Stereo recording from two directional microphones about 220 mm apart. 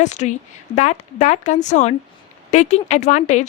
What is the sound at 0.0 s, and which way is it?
A woman's voice, 30° left (ahead or behind).